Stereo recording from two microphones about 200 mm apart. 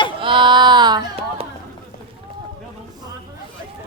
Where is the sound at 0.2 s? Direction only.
25° right (ahead or behind).